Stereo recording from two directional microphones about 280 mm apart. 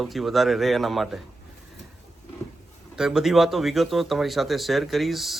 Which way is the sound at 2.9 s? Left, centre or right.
Centre.